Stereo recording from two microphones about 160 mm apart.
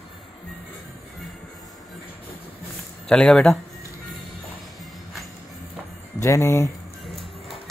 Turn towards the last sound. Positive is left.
turn(degrees=0)  # may be behind; listen again after turning